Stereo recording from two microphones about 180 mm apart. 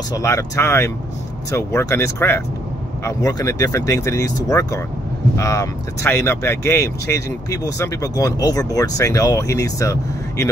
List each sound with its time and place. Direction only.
0.1 s speech: 15° left (ahead or behind)